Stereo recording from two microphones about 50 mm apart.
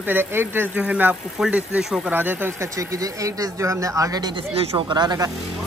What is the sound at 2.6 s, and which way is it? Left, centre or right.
Speech, right.